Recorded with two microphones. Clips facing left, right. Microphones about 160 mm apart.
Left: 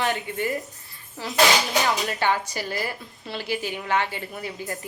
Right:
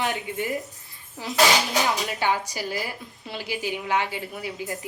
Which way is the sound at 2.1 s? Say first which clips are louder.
Left 1 dB; 10° right (ahead or behind).